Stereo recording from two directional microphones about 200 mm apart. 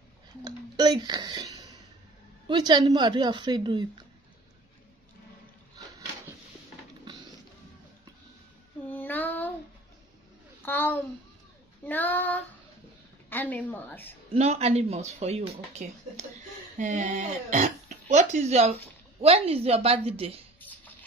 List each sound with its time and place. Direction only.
0.4 s a woman's voice: 20° right (ahead or behind)
8.8 s child singing: 10° left (ahead or behind)
10.6 s a child's voice: 10° left (ahead or behind)
14.3 s a woman's voice: 30° right (ahead or behind)